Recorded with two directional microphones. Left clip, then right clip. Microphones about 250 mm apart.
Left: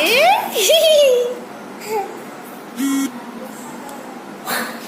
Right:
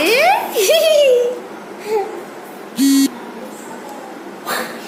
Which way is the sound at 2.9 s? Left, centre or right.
Right.